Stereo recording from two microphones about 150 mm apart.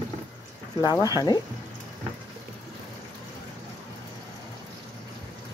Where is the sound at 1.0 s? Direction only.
25° left (ahead or behind).